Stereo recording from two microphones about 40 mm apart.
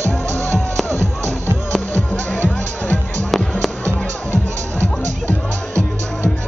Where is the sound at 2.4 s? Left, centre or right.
Left.